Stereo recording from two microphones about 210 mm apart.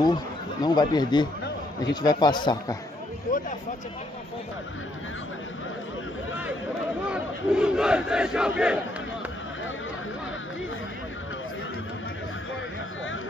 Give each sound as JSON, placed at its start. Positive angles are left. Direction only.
{"t": 0.0, "sound": "speech", "side_deg": 20}
{"t": 7.1, "sound": "battle cry", "side_deg": -5}